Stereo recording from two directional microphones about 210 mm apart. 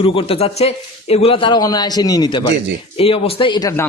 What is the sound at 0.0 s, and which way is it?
Speech, 25° left (ahead or behind).